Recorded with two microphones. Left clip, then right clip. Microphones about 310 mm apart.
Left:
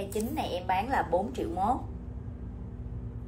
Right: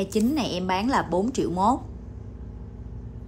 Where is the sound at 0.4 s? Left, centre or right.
Centre.